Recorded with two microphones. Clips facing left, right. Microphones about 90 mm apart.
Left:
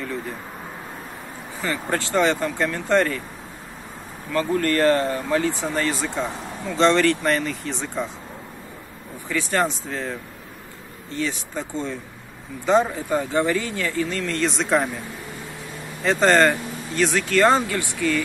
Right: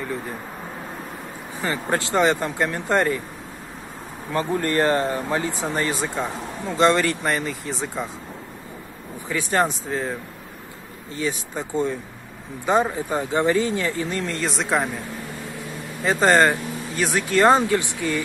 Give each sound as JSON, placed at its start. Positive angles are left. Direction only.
{"t": 1.6, "sound": "speech", "side_deg": -20}
{"t": 4.3, "sound": "speech", "side_deg": -20}
{"t": 9.3, "sound": "speech", "side_deg": -20}
{"t": 11.1, "sound": "speech", "side_deg": -15}
{"t": 14.4, "sound": "speech", "side_deg": -5}
{"t": 16.0, "sound": "speech", "side_deg": -10}